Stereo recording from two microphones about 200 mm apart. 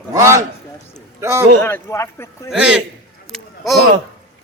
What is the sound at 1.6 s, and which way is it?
Speech, 10° left (ahead or behind).